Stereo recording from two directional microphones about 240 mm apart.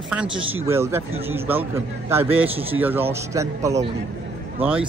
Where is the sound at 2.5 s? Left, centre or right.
Right.